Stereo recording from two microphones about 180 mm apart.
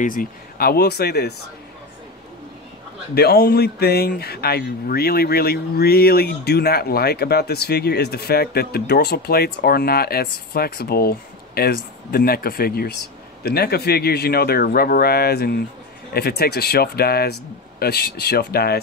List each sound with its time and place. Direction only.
0.0 s speech: 50° left (ahead or behind)
3.2 s speech: 60° left (ahead or behind)